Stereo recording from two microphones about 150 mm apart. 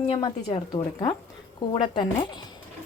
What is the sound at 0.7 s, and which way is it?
Speech, 30° left (ahead or behind).